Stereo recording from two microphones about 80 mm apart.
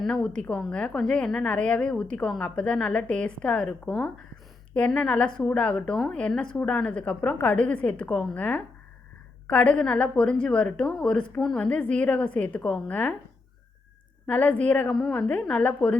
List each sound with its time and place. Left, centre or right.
0.0 s a woman's voice: centre
14.3 s a woman's voice: centre
14.9 s a woman's voice: centre